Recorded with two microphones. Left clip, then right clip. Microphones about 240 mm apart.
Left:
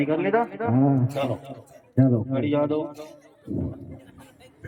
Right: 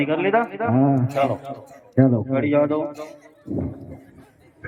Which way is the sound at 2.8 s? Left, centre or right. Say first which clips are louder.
Right 6 dB; centre.